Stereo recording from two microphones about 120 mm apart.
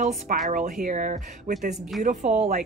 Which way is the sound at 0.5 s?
90° right.